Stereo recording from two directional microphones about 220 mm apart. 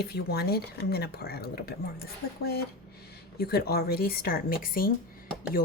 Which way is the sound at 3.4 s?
45° left (ahead or behind).